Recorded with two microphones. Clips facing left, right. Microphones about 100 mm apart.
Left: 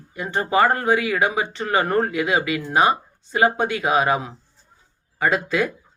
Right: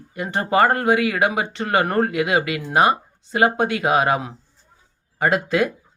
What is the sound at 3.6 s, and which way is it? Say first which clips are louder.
Speech: right 1 dB; 50° right (ahead or behind).